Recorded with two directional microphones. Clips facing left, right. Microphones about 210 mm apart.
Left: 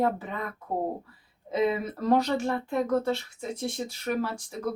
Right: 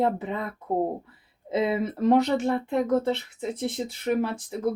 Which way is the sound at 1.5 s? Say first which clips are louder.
Right 1 dB; 25° right (ahead or behind).